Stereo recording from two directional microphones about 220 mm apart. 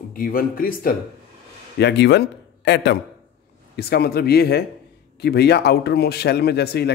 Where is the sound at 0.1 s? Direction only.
40° left (ahead or behind).